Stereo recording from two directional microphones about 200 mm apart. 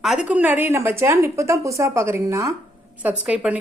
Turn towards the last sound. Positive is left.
turn(degrees=-5)  # may be behind; listen again after turning